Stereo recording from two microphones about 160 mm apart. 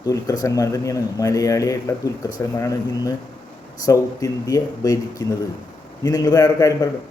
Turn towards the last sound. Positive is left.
turn(degrees=20)  # may be behind; listen again after turning